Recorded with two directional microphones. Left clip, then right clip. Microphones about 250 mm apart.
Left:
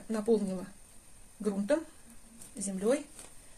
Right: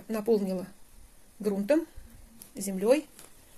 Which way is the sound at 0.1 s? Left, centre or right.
Right.